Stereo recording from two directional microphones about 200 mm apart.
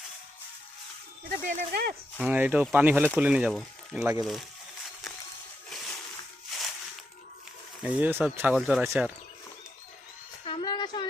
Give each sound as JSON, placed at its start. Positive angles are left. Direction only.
{"t": 1.3, "sound": "speech", "side_deg": -40}
{"t": 2.1, "sound": "speech", "side_deg": -10}
{"t": 7.8, "sound": "speech", "side_deg": -5}
{"t": 10.4, "sound": "a sound", "side_deg": 25}